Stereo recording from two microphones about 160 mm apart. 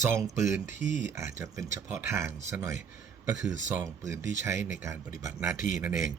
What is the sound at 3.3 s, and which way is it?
Speech, 55° left (ahead or behind).